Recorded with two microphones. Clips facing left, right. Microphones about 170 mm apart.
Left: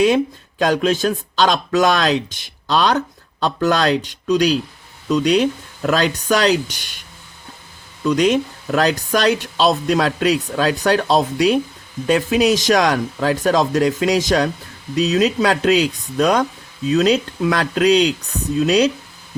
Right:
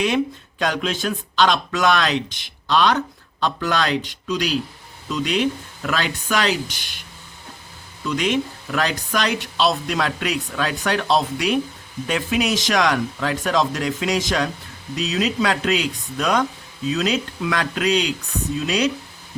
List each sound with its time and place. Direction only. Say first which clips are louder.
0.6 s speech: left 6 dB; 40° left (ahead or behind)
8.1 s speech: left 5 dB; 40° left (ahead or behind)